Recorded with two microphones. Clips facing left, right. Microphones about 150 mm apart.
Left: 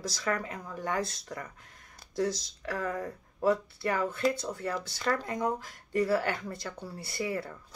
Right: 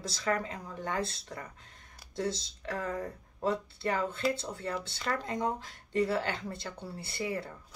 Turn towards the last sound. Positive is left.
turn(degrees=-25)  # may be behind; listen again after turning